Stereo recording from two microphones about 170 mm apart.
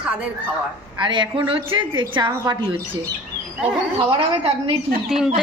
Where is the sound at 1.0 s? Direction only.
30° right (ahead or behind).